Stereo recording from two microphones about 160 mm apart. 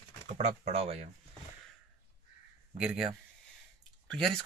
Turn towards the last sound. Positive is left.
turn(degrees=5)  # may be behind; listen again after turning